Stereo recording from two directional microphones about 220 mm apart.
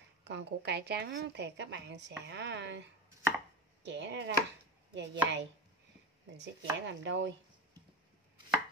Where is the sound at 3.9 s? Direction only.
55° right (ahead or behind).